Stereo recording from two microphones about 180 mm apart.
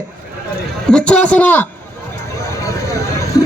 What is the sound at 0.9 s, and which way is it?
Speech, 5° left (ahead or behind).